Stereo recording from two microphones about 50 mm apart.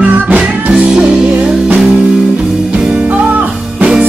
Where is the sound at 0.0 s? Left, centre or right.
Right; by 2.6 s centre.